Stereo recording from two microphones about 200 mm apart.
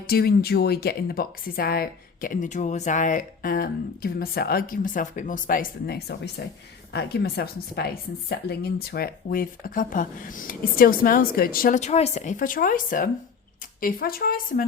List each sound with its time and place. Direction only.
0.1 s speech: 50° left (ahead or behind)